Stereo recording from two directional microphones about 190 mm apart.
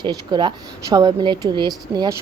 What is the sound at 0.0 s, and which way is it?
A woman's voice, 25° right (ahead or behind).